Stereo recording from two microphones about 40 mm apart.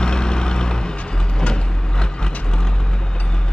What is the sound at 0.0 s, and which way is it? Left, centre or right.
Vehicle, centre.